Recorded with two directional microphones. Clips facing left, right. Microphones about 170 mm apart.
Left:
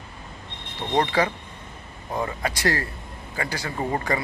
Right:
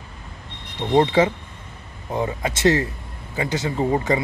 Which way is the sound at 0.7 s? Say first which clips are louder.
Right 6 dB; 20° right (ahead or behind).